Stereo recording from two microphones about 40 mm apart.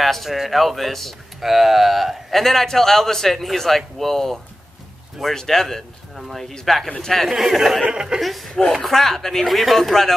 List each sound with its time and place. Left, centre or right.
0.0 s a man's voice: centre
7.2 s speech: centre
7.8 s speech: right
8.2 s speech: centre